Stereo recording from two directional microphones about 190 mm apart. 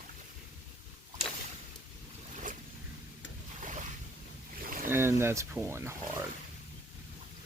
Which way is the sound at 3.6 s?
40° right (ahead or behind).